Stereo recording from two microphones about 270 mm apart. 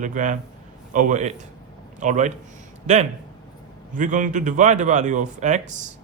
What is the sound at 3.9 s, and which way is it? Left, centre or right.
Speech, right.